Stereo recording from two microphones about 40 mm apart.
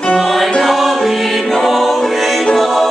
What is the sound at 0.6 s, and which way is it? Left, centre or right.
Choir, centre.